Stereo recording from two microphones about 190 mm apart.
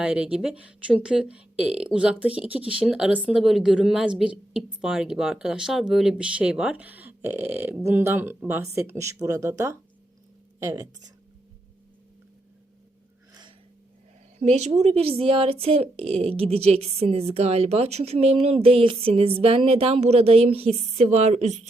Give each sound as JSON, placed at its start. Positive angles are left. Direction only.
{"t": 0.0, "sound": "a woman's voice", "side_deg": -5}
{"t": 14.3, "sound": "a woman's voice", "side_deg": -35}